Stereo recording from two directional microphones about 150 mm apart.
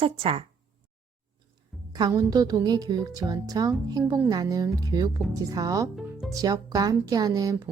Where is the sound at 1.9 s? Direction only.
25° right (ahead or behind).